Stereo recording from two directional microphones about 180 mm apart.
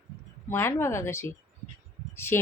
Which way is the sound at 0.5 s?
15° left (ahead or behind).